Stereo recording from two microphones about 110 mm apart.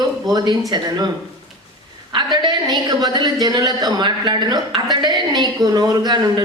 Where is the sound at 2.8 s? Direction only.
40° right (ahead or behind).